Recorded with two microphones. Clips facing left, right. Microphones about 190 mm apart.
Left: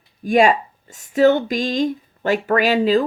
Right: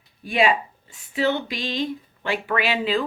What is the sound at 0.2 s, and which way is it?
A woman's voice, 45° left (ahead or behind).